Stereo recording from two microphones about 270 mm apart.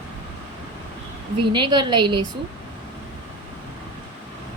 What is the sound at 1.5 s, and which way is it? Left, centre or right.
Speech, centre.